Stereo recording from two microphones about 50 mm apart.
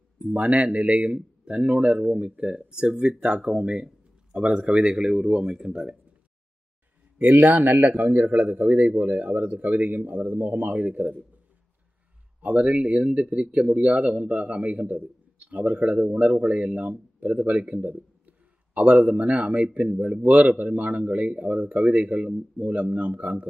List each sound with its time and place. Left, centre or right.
0.2 s speech: right
7.2 s a man's voice: right
12.4 s speech: right